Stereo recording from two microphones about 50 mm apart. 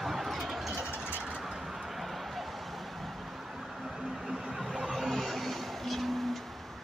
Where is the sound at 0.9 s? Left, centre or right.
Right.